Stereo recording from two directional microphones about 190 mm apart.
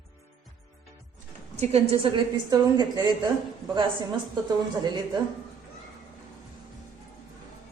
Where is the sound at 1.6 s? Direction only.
30° right (ahead or behind).